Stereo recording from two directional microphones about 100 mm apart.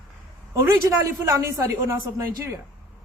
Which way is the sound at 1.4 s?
30° right (ahead or behind).